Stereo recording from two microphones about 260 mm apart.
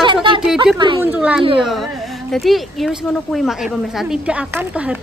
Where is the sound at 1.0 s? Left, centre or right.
Centre.